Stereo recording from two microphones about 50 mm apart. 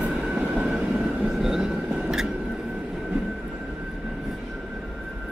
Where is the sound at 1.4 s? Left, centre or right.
Centre.